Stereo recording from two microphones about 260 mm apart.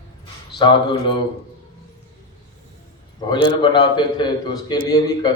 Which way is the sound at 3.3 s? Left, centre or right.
Centre.